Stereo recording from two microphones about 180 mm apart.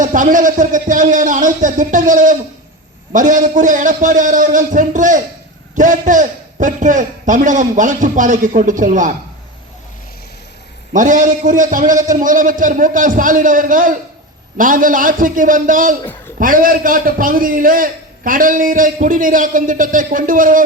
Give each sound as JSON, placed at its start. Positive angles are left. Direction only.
{"t": 0.0, "sound": "a man's voice", "side_deg": -45}
{"t": 10.9, "sound": "a man's voice", "side_deg": -45}